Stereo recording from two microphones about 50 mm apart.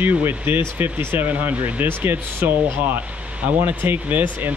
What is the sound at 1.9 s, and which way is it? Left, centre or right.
Speech, right.